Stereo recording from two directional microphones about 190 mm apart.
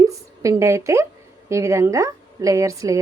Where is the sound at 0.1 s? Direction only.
15° right (ahead or behind).